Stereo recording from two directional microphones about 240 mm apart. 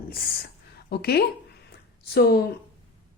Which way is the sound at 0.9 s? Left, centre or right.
Left.